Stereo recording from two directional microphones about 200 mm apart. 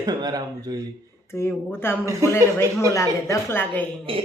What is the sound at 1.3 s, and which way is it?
Speech, 10° left (ahead or behind).